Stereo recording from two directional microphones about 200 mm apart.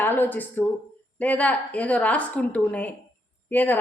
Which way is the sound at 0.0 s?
10° left (ahead or behind).